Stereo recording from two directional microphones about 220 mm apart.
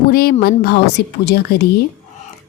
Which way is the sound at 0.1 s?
45° left (ahead or behind).